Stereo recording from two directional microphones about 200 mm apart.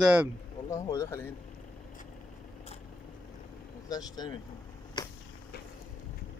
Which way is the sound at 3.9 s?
20° left (ahead or behind).